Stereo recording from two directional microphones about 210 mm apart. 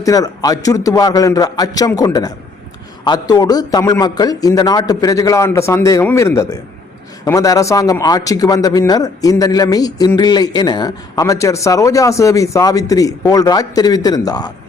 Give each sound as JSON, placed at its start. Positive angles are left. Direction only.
{"t": 0.0, "sound": "a man's voice", "side_deg": 15}